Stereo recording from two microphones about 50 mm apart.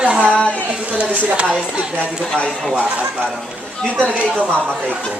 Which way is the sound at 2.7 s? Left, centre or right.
Right.